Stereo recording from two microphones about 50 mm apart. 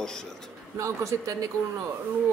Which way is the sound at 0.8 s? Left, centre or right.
Right.